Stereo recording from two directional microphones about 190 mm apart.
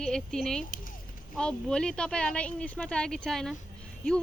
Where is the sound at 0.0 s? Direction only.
Centre (ahead or behind).